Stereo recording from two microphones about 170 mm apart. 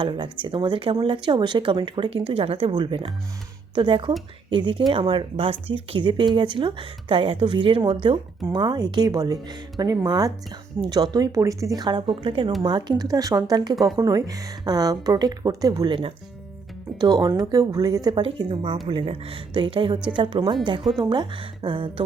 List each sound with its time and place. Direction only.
0.0 s speech: 30° right (ahead or behind)